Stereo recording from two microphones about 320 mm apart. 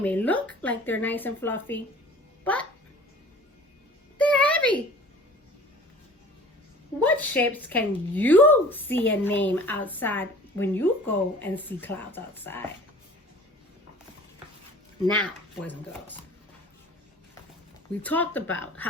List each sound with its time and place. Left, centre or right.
0.0 s speech: centre
4.2 s a sound: centre
7.0 s speech: centre
15.1 s speech: centre
18.0 s speech: centre